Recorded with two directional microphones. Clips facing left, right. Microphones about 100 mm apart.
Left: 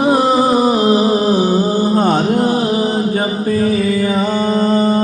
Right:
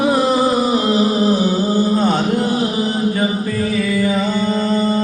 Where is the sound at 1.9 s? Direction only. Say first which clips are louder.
Left 3 dB; 45° left (ahead or behind).